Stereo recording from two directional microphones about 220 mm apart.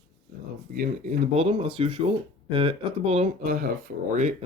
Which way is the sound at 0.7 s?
35° right (ahead or behind).